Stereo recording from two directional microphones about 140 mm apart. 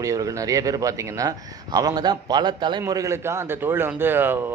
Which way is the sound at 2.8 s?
20° right (ahead or behind).